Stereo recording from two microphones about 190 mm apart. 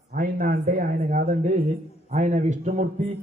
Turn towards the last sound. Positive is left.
turn(degrees=-35)  # may be behind; listen again after turning